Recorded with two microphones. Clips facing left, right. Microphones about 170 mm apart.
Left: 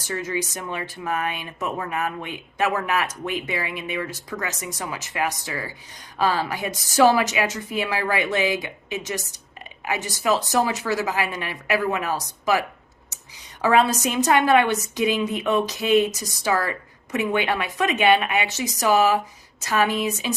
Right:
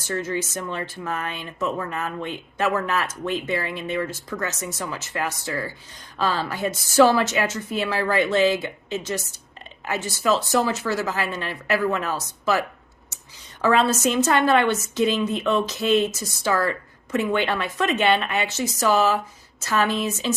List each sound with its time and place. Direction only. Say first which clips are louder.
0.0 s speech: right 1 dB; 15° left (ahead or behind)